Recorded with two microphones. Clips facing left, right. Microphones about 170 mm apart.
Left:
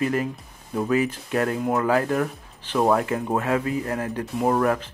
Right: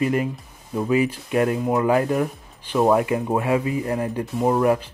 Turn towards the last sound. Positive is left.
turn(degrees=-10)  # may be behind; listen again after turning